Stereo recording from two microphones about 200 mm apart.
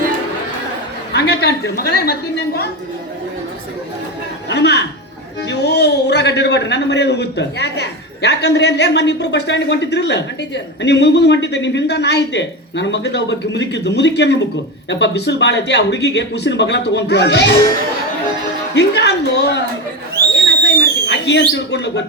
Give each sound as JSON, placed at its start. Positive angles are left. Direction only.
{"t": 1.1, "sound": "a woman's voice", "side_deg": 55}
{"t": 4.4, "sound": "a man's voice", "side_deg": 55}
{"t": 18.7, "sound": "a man's voice", "side_deg": 60}
{"t": 20.3, "sound": "a sound", "side_deg": 65}
{"t": 21.5, "sound": "a man's voice", "side_deg": 60}